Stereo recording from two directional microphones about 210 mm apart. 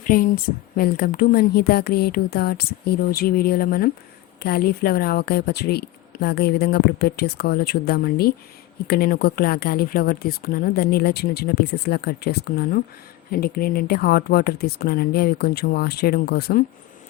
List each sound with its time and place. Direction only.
0.0 s speech: 40° left (ahead or behind)